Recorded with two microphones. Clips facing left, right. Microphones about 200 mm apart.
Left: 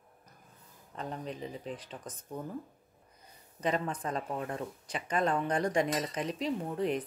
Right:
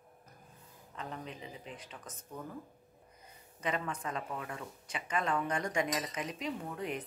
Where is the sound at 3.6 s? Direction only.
35° left (ahead or behind).